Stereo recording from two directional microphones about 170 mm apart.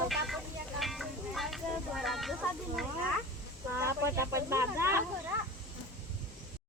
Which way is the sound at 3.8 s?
15° right (ahead or behind).